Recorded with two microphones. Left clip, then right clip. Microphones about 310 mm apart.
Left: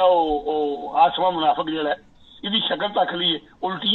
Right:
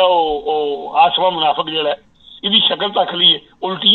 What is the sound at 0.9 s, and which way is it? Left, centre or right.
A man's voice, right.